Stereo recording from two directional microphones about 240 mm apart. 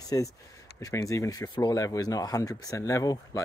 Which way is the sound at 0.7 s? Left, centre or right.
Centre.